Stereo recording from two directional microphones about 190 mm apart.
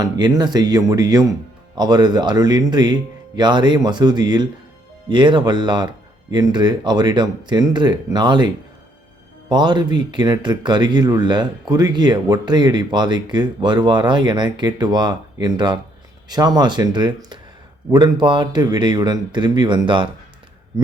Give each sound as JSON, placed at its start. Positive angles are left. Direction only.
{"t": 0.0, "sound": "speech", "side_deg": -20}